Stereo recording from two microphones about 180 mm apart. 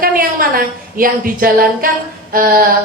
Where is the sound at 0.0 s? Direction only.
55° right (ahead or behind).